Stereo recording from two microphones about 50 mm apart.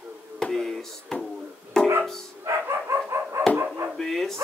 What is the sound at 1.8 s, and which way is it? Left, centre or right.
Music, centre.